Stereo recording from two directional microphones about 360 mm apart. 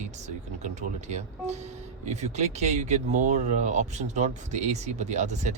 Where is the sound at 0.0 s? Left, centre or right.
Centre.